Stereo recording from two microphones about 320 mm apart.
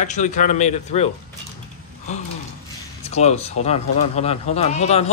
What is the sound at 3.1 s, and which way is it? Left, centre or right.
Speech, centre.